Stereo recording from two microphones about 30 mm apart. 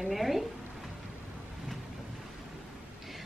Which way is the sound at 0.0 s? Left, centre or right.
Centre.